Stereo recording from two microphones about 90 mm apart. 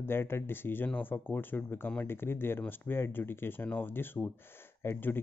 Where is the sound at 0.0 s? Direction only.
25° left (ahead or behind).